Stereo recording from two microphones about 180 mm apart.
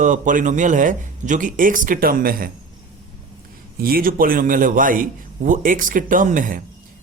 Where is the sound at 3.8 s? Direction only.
55° right (ahead or behind).